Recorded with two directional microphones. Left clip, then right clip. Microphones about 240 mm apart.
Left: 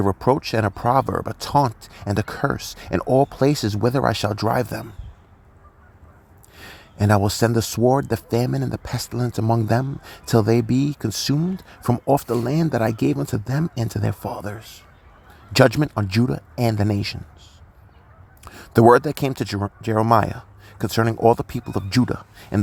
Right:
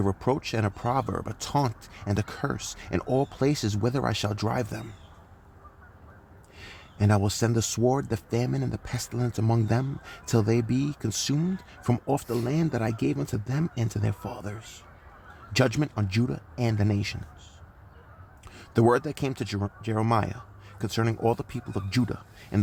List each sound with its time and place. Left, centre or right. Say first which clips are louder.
0.0 s speech: left 8 dB; centre
6.6 s speech: left 6 dB; left
18.4 s speech: left 10 dB; left